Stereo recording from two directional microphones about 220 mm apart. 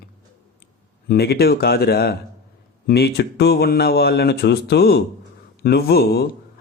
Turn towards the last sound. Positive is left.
turn(degrees=45)  # may be behind; listen again after turning